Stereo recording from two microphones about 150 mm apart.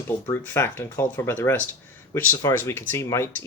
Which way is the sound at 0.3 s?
15° left (ahead or behind).